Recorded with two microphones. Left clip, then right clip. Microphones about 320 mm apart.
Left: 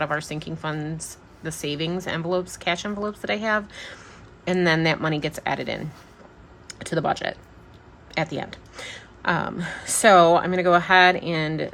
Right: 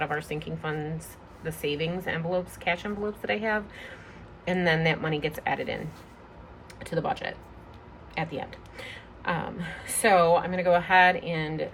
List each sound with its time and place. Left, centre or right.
0.0 s speech: centre